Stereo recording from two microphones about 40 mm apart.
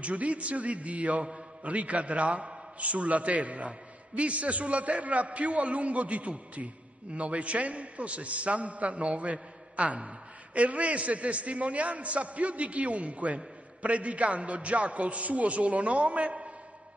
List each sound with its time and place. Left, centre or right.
0.0 s a man's voice: right